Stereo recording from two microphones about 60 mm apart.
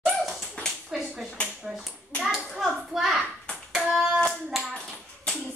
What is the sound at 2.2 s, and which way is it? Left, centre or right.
Hands, centre.